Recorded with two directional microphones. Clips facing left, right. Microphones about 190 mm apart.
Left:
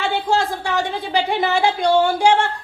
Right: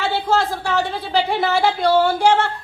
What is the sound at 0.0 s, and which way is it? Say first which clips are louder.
Speech: even; 15° left (ahead or behind).